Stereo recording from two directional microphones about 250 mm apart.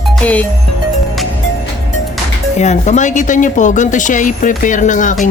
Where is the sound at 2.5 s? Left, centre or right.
Left.